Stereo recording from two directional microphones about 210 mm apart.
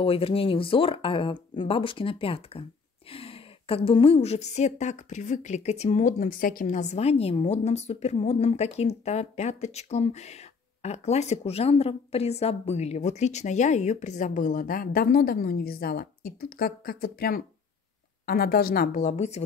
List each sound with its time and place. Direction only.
0.0 s a woman's voice: 25° left (ahead or behind)